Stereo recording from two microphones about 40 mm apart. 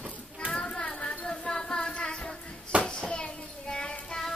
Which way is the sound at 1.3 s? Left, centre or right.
Centre.